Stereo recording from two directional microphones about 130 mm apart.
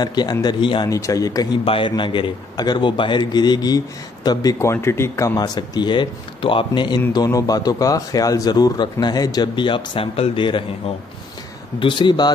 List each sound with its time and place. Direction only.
0.0 s a man's voice: 30° left (ahead or behind)
0.8 s a man's voice: 25° left (ahead or behind)
11.8 s a man's voice: 40° left (ahead or behind)